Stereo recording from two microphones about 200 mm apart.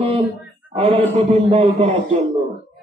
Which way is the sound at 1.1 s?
30° right (ahead or behind).